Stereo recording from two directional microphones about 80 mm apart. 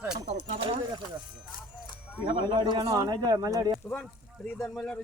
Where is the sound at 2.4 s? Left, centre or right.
Right.